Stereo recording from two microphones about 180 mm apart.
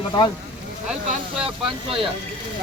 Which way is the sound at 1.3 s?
5° right (ahead or behind).